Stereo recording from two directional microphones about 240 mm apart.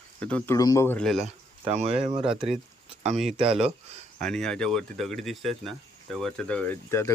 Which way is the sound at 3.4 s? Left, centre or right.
Right.